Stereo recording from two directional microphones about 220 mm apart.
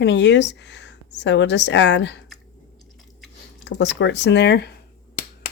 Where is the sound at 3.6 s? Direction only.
55° left (ahead or behind).